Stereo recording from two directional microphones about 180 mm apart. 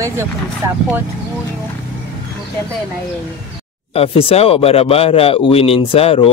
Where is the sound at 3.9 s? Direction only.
30° left (ahead or behind).